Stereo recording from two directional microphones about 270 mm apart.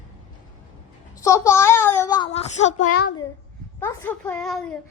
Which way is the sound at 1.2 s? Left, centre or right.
Centre.